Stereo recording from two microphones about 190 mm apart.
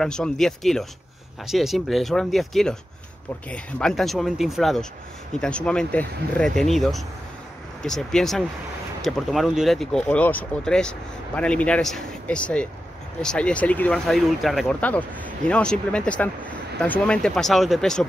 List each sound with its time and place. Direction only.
0.0 s speech: 5° left (ahead or behind)